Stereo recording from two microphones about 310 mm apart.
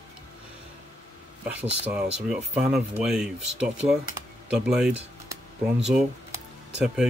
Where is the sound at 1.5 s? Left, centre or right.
Centre.